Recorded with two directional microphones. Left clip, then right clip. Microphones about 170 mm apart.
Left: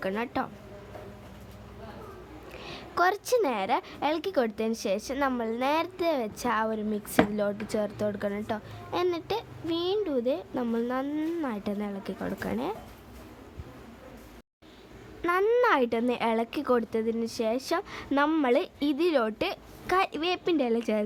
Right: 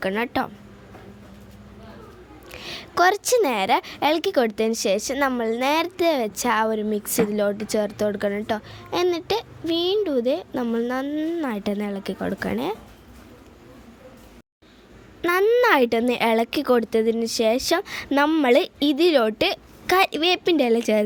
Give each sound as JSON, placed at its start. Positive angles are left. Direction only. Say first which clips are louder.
{"t": 0.0, "sound": "a woman's voice", "louder": "right 7 dB", "side_deg": -30}
{"t": 2.5, "sound": "a woman's voice", "louder": "right 7 dB", "side_deg": -25}
{"t": 11.4, "sound": "a woman's voice", "louder": "right 6 dB", "side_deg": -30}
{"t": 15.6, "sound": "a woman's voice", "louder": "right 6 dB", "side_deg": -25}